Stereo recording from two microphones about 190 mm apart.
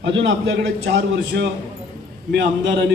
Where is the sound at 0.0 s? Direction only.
75° right (ahead or behind).